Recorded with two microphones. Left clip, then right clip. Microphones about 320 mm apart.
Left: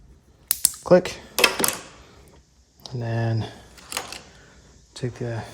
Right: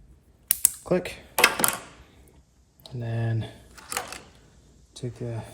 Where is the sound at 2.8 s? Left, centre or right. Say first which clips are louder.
Left 6 dB; left.